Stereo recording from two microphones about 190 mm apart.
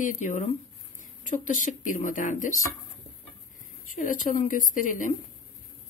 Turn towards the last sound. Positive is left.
turn(degrees=45)  # may be behind; listen again after turning